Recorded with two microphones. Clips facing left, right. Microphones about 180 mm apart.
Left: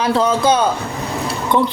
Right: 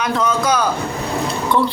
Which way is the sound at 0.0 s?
30° left (ahead or behind).